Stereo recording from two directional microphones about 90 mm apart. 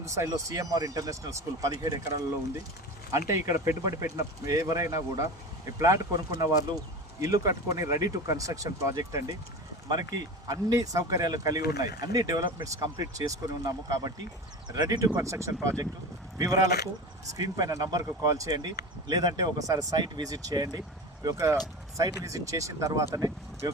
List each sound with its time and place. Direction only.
0.0 s speech: 35° right (ahead or behind)
18.5 s speech: 50° right (ahead or behind)
21.3 s speech: 35° right (ahead or behind)